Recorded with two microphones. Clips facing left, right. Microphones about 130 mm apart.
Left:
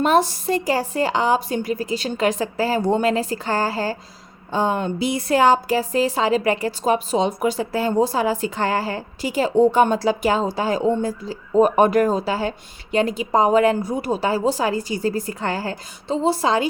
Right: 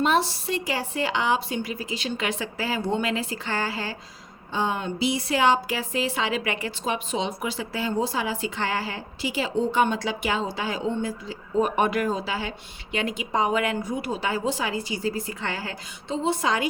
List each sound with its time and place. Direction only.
0.0 s a woman's voice: 45° left (ahead or behind)